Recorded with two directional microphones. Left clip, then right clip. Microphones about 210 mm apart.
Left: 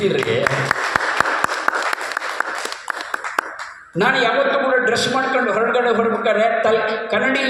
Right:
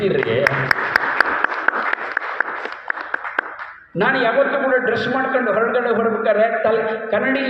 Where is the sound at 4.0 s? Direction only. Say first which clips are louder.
Even; 60° left (ahead or behind).